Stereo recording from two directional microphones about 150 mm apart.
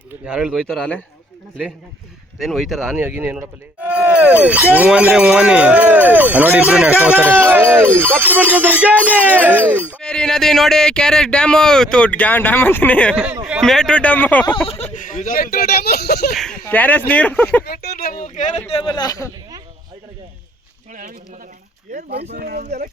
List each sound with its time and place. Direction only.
0.3 s speech: 5° right (ahead or behind)
2.4 s speech: centre (ahead or behind)
10.0 s speech: 5° left (ahead or behind)
13.1 s speech: 10° right (ahead or behind)
13.6 s speech: 5° left (ahead or behind)
14.9 s speech: 60° left (ahead or behind); by 16.3 s 90° left
16.3 s speech: centre (ahead or behind)
16.6 s speech: 10° left (ahead or behind)
17.7 s a sound: 85° left
18.2 s a sound: 55° left (ahead or behind)
18.7 s speech: 30° left (ahead or behind)
21.9 s speech: 90° right